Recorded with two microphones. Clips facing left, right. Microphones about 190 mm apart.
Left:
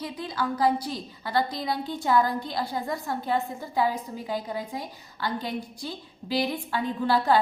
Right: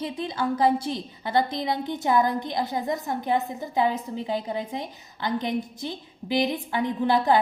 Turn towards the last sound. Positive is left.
turn(degrees=-20)  # may be behind; listen again after turning